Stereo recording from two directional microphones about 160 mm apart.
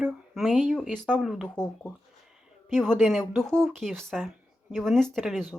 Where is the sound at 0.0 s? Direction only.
Centre (ahead or behind).